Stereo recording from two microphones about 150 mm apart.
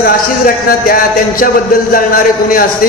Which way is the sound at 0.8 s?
70° left (ahead or behind).